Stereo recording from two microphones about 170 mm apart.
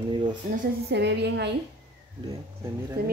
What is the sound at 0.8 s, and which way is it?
Speech, 85° right.